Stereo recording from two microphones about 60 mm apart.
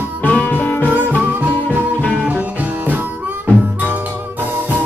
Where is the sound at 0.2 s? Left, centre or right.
Left.